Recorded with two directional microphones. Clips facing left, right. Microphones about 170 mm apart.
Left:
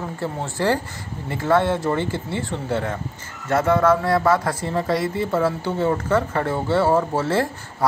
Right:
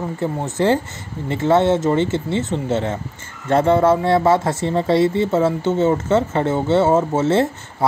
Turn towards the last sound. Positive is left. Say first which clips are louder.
# right 4 dB
turn(degrees=-20)  # may be behind; listen again after turning